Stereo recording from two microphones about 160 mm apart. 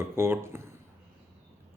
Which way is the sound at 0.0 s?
15° right (ahead or behind).